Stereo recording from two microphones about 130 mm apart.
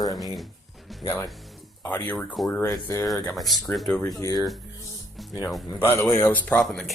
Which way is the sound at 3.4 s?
Centre (ahead or behind).